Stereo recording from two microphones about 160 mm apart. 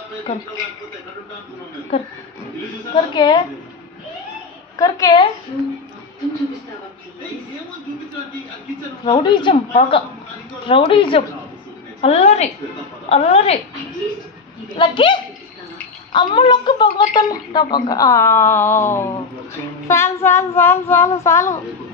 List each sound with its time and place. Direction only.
1.9 s a woman's voice: 35° left (ahead or behind)
4.7 s a woman's voice: 25° left (ahead or behind)
9.0 s a woman's voice: 30° left (ahead or behind)
14.8 s a woman's voice: 30° left (ahead or behind)
19.9 s child singing: 15° left (ahead or behind)